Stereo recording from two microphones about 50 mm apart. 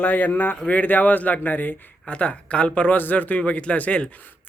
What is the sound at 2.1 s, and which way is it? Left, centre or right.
Speech, left.